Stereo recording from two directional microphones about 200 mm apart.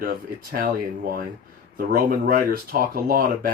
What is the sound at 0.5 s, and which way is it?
Speech, 45° right (ahead or behind).